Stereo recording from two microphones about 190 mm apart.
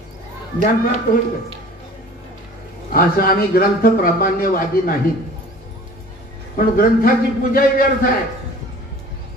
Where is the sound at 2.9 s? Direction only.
50° left (ahead or behind).